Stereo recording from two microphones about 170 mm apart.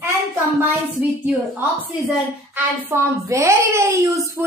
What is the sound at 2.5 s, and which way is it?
A woman's voice, 15° right (ahead or behind).